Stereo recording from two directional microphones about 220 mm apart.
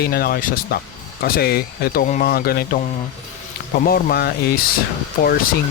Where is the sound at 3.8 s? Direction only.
45° left (ahead or behind).